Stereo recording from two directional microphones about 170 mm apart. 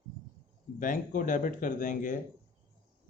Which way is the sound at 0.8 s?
50° left (ahead or behind).